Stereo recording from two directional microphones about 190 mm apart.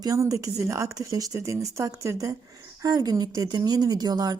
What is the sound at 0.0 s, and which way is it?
A woman's voice, 15° right (ahead or behind).